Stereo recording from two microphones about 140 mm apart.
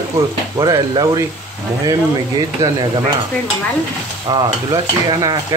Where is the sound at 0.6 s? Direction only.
25° right (ahead or behind).